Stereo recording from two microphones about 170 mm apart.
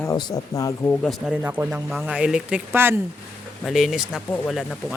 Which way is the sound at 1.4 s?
15° right (ahead or behind).